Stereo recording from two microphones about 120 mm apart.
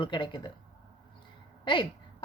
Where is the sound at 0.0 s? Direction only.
40° left (ahead or behind).